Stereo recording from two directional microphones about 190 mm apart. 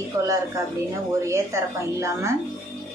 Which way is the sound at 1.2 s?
15° right (ahead or behind).